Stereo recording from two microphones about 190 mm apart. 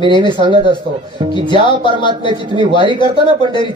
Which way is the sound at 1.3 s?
25° left (ahead or behind).